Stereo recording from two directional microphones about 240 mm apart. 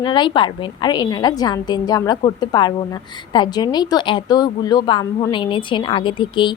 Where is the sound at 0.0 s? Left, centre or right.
Centre.